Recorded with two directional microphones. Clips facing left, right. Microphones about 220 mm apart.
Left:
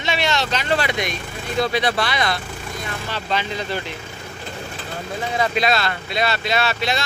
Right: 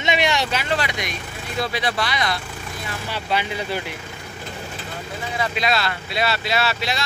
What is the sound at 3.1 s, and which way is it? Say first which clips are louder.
Speech: right 1 dB; 10° right (ahead or behind).